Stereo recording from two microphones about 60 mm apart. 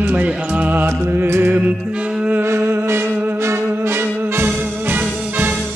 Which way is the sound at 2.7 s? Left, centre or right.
Right.